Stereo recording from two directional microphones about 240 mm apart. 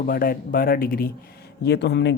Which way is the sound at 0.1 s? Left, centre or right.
Left.